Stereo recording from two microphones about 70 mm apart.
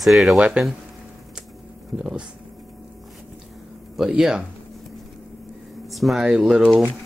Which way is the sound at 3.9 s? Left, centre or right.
Centre.